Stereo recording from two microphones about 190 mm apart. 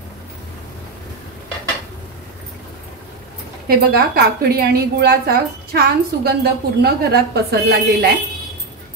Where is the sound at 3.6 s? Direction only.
55° right (ahead or behind).